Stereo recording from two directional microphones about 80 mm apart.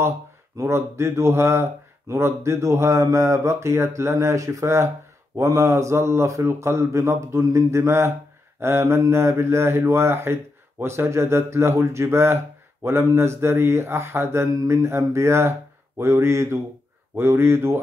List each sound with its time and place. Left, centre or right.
0.6 s speech: right